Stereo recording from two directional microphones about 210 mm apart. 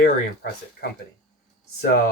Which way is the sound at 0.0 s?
50° left (ahead or behind).